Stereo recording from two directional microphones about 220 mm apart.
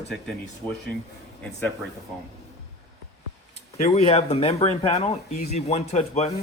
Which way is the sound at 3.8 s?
30° left (ahead or behind).